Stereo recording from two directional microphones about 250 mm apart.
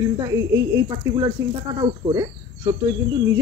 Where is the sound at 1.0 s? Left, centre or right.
Centre.